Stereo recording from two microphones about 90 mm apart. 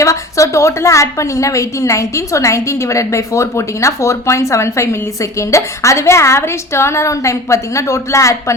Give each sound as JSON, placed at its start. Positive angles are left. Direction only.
{"t": 0.0, "sound": "a woman's voice", "side_deg": 35}